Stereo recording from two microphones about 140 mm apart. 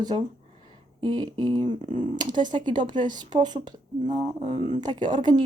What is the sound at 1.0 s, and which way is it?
Speech, 30° right (ahead or behind).